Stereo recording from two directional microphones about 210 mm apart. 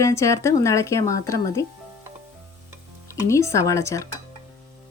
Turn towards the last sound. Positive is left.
turn(degrees=15)  # may be behind; listen again after turning